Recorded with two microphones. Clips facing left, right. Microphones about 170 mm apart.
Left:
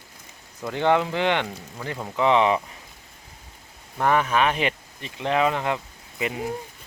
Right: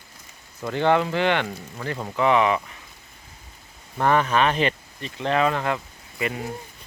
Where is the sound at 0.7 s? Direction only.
15° left (ahead or behind).